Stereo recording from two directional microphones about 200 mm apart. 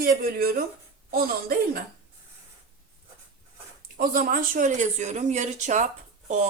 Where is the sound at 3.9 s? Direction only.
45° right (ahead or behind).